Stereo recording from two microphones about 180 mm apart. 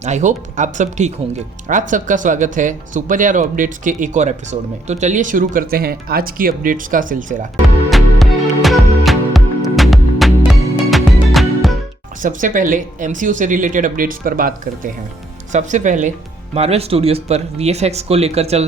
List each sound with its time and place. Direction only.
0.0 s speech: 40° right (ahead or behind)
7.9 s music: centre (ahead or behind)
12.2 s speech: 45° right (ahead or behind)